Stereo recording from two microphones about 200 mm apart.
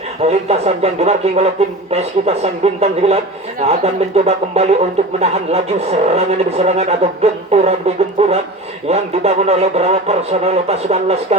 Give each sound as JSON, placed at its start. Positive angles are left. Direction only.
{"t": 0.2, "sound": "speech", "side_deg": -30}